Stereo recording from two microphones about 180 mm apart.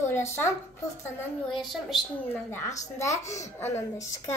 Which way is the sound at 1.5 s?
Centre (ahead or behind).